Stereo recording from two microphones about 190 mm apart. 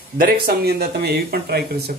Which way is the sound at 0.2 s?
50° right (ahead or behind).